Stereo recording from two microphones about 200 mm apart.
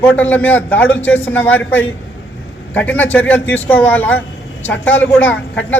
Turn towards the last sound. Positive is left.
turn(degrees=10)  # may be behind; listen again after turning